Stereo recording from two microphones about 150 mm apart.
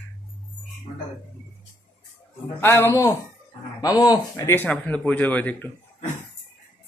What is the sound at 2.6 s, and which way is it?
Speech, 15° left (ahead or behind).